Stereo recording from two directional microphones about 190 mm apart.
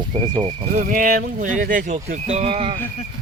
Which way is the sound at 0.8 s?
45° right (ahead or behind).